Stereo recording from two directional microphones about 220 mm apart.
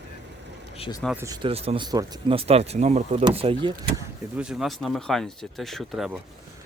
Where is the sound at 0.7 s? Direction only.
25° left (ahead or behind).